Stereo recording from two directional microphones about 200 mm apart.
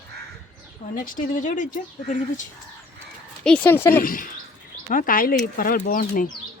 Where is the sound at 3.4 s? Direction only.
5° left (ahead or behind).